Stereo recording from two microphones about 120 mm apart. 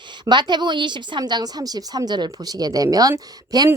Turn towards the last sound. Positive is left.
turn(degrees=-30)  # may be behind; listen again after turning